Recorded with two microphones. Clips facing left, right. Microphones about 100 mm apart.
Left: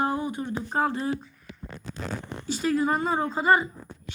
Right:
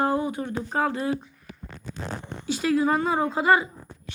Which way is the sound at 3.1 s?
10° right (ahead or behind).